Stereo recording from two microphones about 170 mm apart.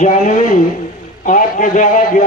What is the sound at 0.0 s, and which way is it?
A man's voice, 50° left (ahead or behind).